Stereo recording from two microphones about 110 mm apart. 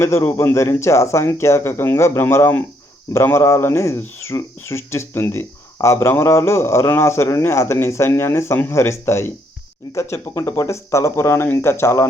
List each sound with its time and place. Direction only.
0.0 s speech: 25° left (ahead or behind)